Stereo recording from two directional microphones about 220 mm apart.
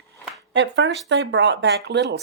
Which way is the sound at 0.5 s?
55° right (ahead or behind).